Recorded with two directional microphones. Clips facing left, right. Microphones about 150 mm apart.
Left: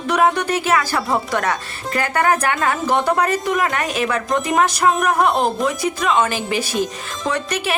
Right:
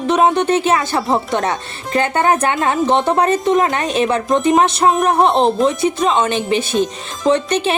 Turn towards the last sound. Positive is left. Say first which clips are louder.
# right 7 dB
turn(degrees=-25)  # may be behind; listen again after turning